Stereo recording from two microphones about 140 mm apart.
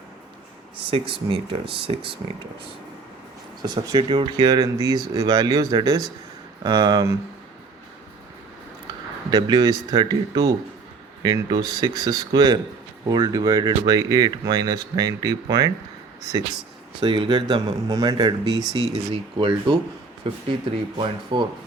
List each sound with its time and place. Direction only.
0.9 s speech: 40° right (ahead or behind)
3.6 s speech: 30° right (ahead or behind)
9.3 s speech: 30° right (ahead or behind)
17.0 s speech: 35° right (ahead or behind)